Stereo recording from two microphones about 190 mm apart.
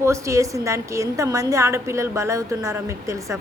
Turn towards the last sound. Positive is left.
turn(degrees=-15)  # may be behind; listen again after turning